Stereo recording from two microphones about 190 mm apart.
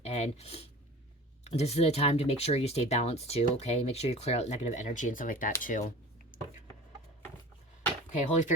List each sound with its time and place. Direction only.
0.0 s speech: 35° left (ahead or behind)
6.3 s a sound: 45° left (ahead or behind)
8.1 s speech: 40° left (ahead or behind)